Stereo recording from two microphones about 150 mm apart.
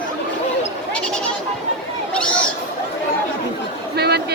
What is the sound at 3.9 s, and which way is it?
Chatter, 90° right.